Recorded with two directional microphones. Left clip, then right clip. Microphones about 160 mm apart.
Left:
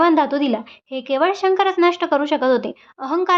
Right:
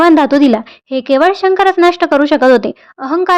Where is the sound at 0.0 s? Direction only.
45° right (ahead or behind).